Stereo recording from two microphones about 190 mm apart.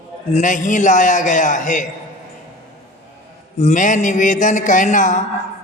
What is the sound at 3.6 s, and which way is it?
A man's voice, 40° left (ahead or behind).